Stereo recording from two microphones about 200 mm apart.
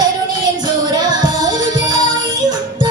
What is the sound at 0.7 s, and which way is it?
Music, 20° right (ahead or behind).